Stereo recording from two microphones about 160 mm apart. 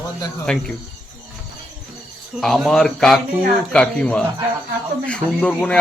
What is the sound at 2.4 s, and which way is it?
Speech, centre (ahead or behind).